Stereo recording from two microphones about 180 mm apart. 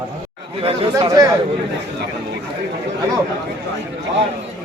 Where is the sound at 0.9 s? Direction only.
20° right (ahead or behind).